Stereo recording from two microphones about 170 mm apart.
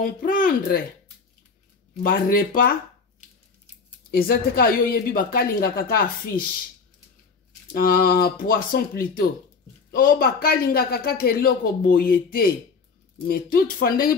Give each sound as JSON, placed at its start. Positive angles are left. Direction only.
{"t": 0.0, "sound": "speech", "side_deg": 55}
{"t": 2.0, "sound": "speech", "side_deg": 55}
{"t": 4.1, "sound": "speech", "side_deg": 65}
{"t": 7.7, "sound": "speech", "side_deg": 60}